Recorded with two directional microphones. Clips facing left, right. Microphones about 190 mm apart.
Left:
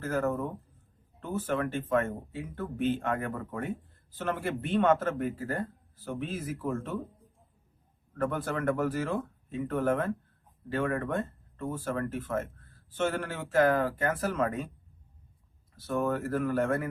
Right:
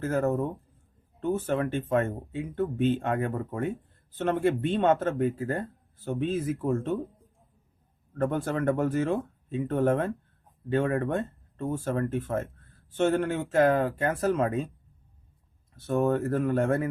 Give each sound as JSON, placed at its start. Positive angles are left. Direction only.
{"t": 0.0, "sound": "speech", "side_deg": -25}
{"t": 8.2, "sound": "speech", "side_deg": -25}
{"t": 15.9, "sound": "speech", "side_deg": -25}